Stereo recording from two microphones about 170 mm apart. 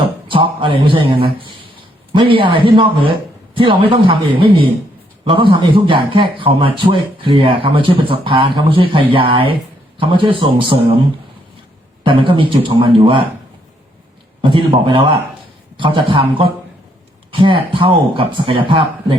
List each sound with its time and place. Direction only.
0.0 s a man's voice: 30° right (ahead or behind)
12.0 s speech: 30° right (ahead or behind)
14.5 s a man's voice: 30° right (ahead or behind)